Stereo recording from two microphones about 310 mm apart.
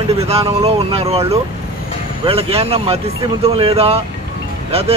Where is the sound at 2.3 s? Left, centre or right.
Centre.